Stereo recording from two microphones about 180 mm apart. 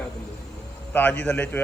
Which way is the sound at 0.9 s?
10° left (ahead or behind).